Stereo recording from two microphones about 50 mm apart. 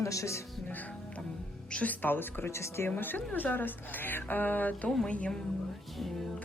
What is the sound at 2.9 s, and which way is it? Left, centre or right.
Speech, left.